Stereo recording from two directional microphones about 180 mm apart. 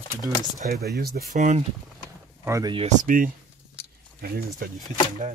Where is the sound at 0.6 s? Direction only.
50° right (ahead or behind).